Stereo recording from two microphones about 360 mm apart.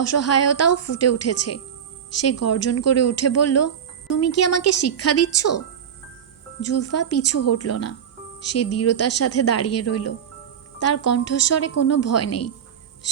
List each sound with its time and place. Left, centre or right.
0.0 s a woman's voice: left